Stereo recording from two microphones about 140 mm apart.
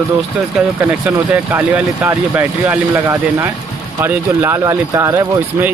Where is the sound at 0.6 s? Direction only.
10° right (ahead or behind).